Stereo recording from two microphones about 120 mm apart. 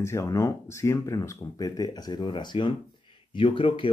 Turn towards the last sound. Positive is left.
turn(degrees=45)  # may be behind; listen again after turning